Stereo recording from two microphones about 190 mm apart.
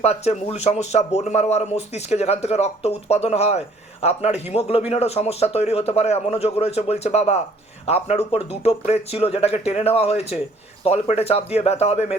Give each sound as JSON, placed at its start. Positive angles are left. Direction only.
{"t": 0.0, "sound": "speech", "side_deg": 35}